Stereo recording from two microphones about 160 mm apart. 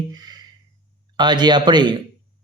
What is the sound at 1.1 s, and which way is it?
Mantra, 30° right (ahead or behind).